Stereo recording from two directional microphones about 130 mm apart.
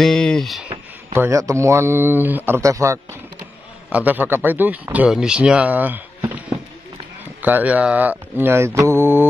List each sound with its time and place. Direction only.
0.0 s speech: centre (ahead or behind)
1.1 s speech: 20° right (ahead or behind)
3.9 s speech: 15° right (ahead or behind)
7.4 s speech: 15° right (ahead or behind)